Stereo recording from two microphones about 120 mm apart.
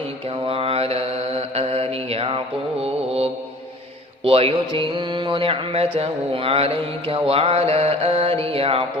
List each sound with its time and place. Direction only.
0.4 s mantra: 55° right (ahead or behind)
4.2 s music: 50° right (ahead or behind)